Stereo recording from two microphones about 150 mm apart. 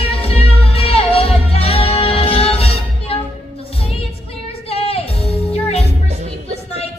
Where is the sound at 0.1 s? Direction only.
40° left (ahead or behind).